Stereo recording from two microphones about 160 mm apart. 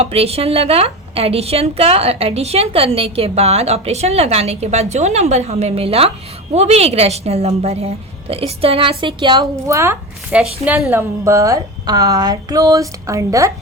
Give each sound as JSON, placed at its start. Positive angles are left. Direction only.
{"t": 0.0, "sound": "a woman's voice", "side_deg": -40}